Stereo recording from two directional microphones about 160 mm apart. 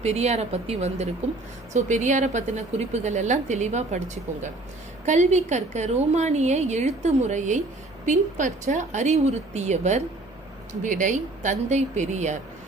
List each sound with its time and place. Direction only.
0.0 s a woman's voice: 45° right (ahead or behind)